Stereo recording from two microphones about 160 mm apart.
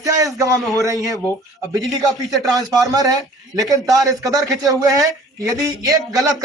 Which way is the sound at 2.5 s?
25° right (ahead or behind).